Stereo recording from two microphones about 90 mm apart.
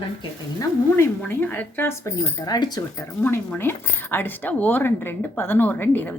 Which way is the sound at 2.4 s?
50° left (ahead or behind).